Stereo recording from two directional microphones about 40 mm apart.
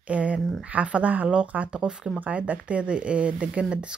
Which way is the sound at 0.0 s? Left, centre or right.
Right.